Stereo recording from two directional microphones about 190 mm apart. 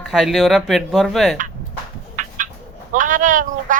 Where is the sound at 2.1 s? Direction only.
45° right (ahead or behind).